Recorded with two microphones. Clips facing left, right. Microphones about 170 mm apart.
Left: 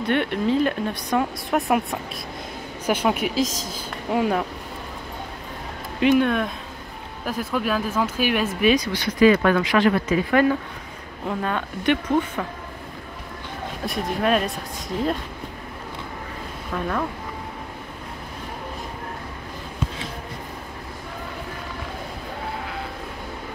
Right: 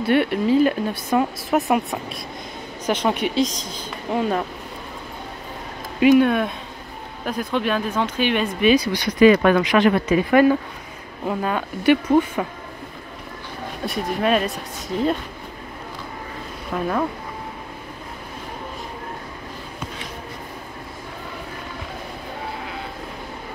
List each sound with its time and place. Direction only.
0.0 s speech: 5° right (ahead or behind)
5.9 s speech: 5° right (ahead or behind)
8.7 s speech: 10° right (ahead or behind)
13.8 s speech: centre (ahead or behind)
16.7 s speech: 20° right (ahead or behind)